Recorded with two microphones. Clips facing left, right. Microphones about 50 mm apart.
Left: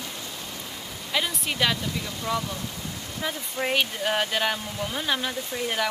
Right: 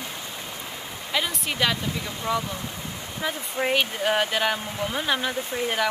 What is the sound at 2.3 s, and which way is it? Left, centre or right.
Speech, centre.